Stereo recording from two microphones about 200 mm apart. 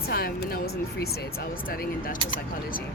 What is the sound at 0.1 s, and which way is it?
Speech, 50° left (ahead or behind).